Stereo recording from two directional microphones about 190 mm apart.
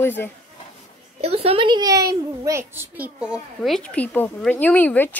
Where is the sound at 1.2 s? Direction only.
30° right (ahead or behind).